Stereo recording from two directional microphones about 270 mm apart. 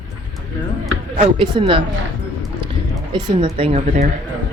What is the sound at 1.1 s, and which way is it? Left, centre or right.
Speech, centre.